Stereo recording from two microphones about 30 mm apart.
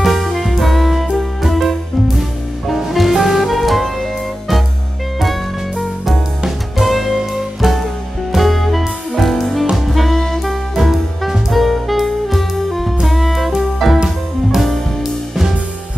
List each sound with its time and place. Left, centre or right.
0.0 s music: centre
2.7 s music: centre
6.8 s music: centre
7.1 s music: centre
8.4 s music: centre
9.8 s saxophone: centre
10.4 s music: centre
15.0 s music: centre